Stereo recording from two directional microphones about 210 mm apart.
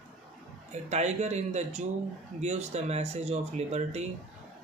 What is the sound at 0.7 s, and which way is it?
Speech, 30° right (ahead or behind).